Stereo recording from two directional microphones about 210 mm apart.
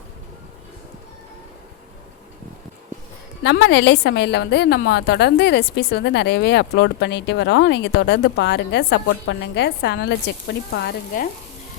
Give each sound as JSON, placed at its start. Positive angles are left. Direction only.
{"t": 3.4, "sound": "a woman's voice", "side_deg": 55}
{"t": 10.8, "sound": "frying", "side_deg": 50}